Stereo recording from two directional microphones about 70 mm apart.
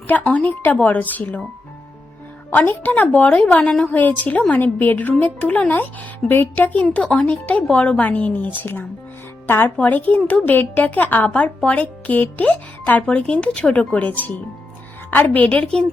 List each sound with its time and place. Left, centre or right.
0.1 s a woman's voice: left
2.5 s a woman's voice: left
9.7 s a woman's voice: left